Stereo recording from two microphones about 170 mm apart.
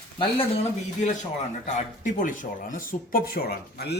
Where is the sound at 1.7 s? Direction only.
45° left (ahead or behind); by 4.0 s 70° left (ahead or behind).